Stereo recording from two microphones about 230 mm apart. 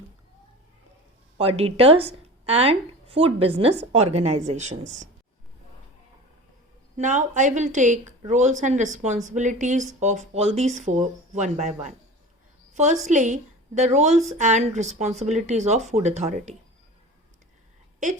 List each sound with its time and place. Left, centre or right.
1.4 s a woman's voice: right
6.9 s a woman's voice: right